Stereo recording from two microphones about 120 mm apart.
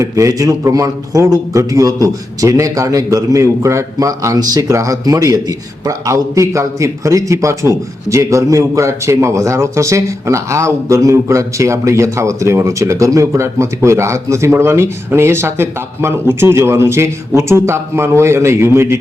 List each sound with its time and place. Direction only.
0.0 s a man's voice: 25° right (ahead or behind)